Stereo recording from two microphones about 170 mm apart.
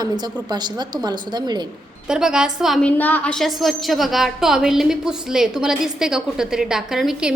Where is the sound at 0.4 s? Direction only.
25° right (ahead or behind).